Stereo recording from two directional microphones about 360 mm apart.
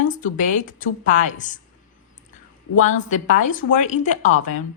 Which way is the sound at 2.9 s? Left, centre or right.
Left.